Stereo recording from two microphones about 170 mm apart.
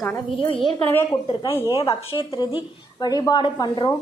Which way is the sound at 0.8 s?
10° left (ahead or behind).